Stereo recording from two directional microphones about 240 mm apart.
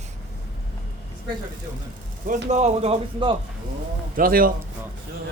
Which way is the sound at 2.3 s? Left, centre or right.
Right.